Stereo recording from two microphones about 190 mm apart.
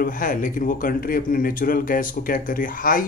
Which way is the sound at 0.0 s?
45° left (ahead or behind).